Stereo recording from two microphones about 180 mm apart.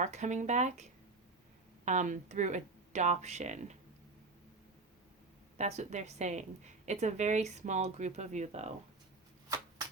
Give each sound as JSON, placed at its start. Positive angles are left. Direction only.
{"t": 0.0, "sound": "a woman's voice", "side_deg": -40}
{"t": 5.5, "sound": "a woman's voice", "side_deg": -40}